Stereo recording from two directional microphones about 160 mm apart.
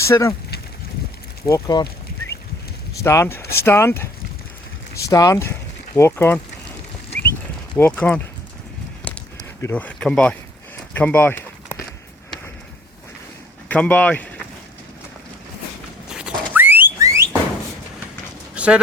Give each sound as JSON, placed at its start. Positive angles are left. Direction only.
{"t": 0.0, "sound": "speech", "side_deg": 15}
{"t": 1.5, "sound": "speech", "side_deg": 20}
{"t": 3.0, "sound": "speech", "side_deg": 20}
{"t": 7.8, "sound": "speech", "side_deg": 10}
{"t": 9.0, "sound": "a sound", "side_deg": 15}
{"t": 13.7, "sound": "speech", "side_deg": 10}
{"t": 16.1, "sound": "a sound", "side_deg": -10}
{"t": 18.5, "sound": "dog", "side_deg": -5}